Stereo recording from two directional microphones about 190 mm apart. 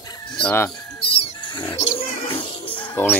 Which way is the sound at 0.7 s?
30° left (ahead or behind).